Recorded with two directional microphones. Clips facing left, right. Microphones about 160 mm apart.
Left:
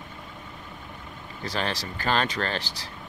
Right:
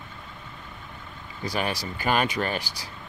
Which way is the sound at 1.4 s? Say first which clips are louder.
Right 2 dB; 10° right (ahead or behind).